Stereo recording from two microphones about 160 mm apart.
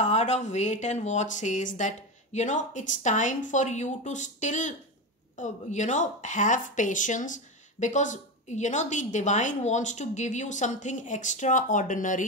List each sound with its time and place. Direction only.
0.0 s a woman's voice: 45° left (ahead or behind)